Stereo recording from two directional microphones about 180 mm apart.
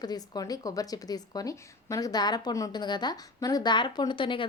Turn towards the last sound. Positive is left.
turn(degrees=25)  # may be behind; listen again after turning